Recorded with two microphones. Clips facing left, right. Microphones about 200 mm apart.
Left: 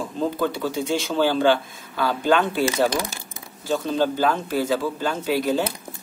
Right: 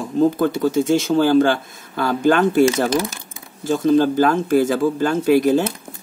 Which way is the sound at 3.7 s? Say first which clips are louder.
Right 7 dB; 45° right (ahead or behind).